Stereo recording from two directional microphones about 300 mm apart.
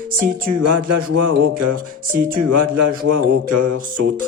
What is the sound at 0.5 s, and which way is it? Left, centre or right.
Music, right.